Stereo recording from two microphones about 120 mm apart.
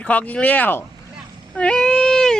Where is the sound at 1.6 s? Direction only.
5° left (ahead or behind).